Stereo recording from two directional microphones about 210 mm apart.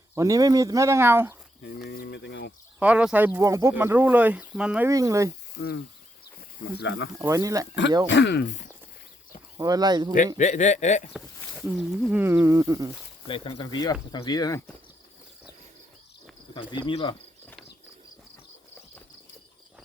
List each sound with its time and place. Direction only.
0.1 s speech: 15° right (ahead or behind)
1.9 s speech: 50° left (ahead or behind)
2.7 s speech: 5° right (ahead or behind)
4.9 s speech: 15° right (ahead or behind)
5.5 s speech: 55° left (ahead or behind)
7.2 s speech: 15° right (ahead or behind)
8.0 s speech: 55° left (ahead or behind)
9.6 s speech: 20° right (ahead or behind)
10.3 s speech: 35° left (ahead or behind)
11.8 s speech: centre (ahead or behind)
13.2 s speech: 25° left (ahead or behind)
16.8 s speech: 25° left (ahead or behind)